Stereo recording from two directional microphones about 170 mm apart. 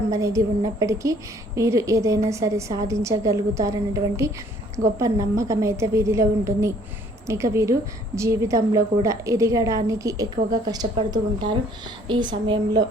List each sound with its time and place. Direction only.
0.1 s a woman's voice: 20° right (ahead or behind)